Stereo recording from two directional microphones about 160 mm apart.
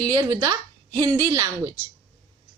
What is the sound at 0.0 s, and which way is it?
A woman's voice, 25° right (ahead or behind).